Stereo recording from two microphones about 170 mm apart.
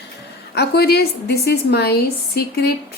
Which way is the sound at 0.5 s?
70° left (ahead or behind).